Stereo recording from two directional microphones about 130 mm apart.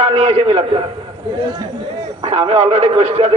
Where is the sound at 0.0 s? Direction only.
50° right (ahead or behind).